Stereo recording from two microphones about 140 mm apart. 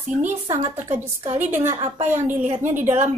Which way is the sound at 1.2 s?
60° right (ahead or behind).